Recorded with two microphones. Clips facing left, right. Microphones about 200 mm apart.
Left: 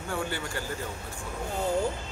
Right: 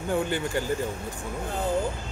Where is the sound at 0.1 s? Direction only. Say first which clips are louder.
Right 7 dB; 20° right (ahead or behind).